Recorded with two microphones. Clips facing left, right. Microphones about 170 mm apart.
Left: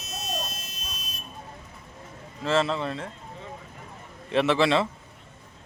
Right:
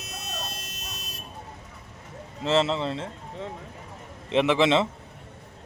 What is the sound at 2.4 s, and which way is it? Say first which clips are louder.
Speech: right 1 dB; 20° right (ahead or behind).